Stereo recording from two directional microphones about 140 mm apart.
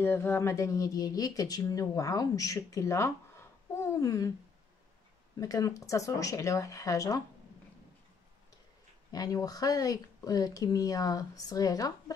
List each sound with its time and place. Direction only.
0.0 s speech: 15° left (ahead or behind)
5.4 s speech: 25° left (ahead or behind)
9.1 s speech: 25° left (ahead or behind)